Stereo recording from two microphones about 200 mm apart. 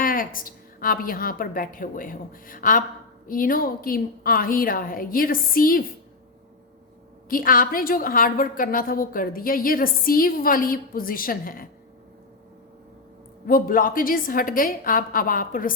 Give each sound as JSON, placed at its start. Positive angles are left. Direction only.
{"t": 0.0, "sound": "a woman's voice", "side_deg": 45}
{"t": 7.3, "sound": "a woman's voice", "side_deg": 45}
{"t": 13.5, "sound": "a woman's voice", "side_deg": 45}